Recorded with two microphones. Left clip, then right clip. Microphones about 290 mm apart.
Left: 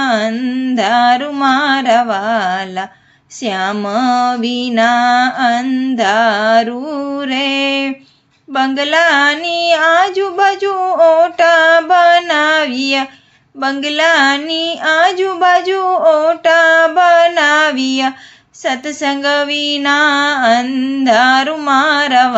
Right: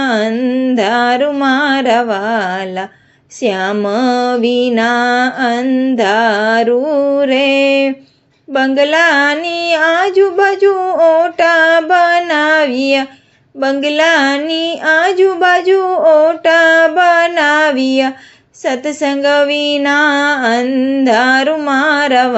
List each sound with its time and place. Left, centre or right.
0.0 s female singing: centre